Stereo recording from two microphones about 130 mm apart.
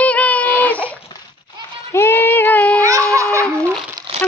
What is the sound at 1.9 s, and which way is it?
Child singing, 20° left (ahead or behind).